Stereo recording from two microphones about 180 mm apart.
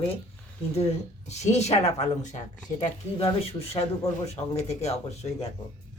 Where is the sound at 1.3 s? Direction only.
40° left (ahead or behind).